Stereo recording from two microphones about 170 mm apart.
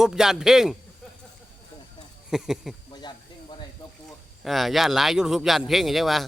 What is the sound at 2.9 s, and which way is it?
Hiss, 25° left (ahead or behind).